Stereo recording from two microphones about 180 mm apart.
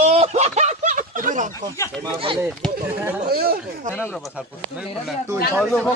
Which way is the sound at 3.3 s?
55° right (ahead or behind).